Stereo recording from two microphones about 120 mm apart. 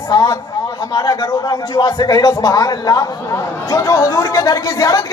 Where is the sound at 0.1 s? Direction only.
30° left (ahead or behind).